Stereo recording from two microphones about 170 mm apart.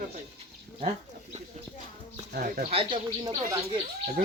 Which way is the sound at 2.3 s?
60° right (ahead or behind).